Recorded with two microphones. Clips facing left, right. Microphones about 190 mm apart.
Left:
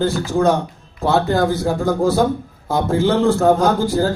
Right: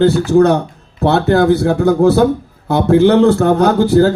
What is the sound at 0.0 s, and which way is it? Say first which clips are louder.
A man's voice: right 7 dB; 65° right (ahead or behind).